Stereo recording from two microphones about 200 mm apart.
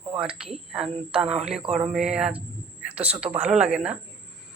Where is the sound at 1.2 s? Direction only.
30° right (ahead or behind).